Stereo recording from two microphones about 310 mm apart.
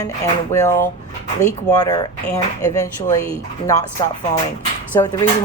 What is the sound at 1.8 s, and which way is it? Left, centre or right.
A woman's voice, centre.